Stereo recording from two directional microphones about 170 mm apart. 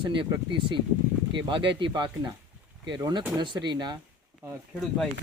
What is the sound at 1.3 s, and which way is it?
Speech, 30° right (ahead or behind).